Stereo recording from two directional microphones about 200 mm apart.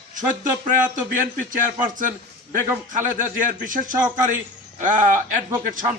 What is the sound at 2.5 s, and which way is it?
A man's voice, 40° right (ahead or behind).